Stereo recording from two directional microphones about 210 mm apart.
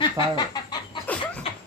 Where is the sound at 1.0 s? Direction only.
5° left (ahead or behind).